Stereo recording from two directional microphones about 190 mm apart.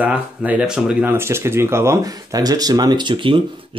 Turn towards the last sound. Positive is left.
turn(degrees=-25)  # may be behind; listen again after turning